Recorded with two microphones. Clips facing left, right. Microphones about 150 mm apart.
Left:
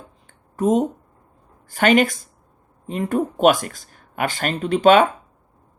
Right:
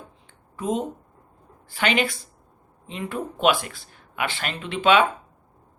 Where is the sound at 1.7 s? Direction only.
45° left (ahead or behind).